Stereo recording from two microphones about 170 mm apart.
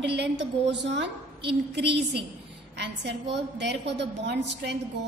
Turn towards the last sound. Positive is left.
turn(degrees=-85)